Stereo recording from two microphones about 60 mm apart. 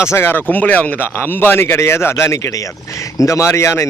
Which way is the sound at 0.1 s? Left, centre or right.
Left.